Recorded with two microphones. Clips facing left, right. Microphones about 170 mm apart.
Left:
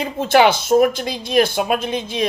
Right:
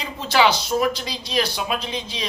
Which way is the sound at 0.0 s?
50° left (ahead or behind).